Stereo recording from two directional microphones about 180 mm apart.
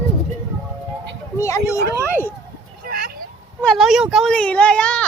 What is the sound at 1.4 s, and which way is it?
Speech, 15° left (ahead or behind).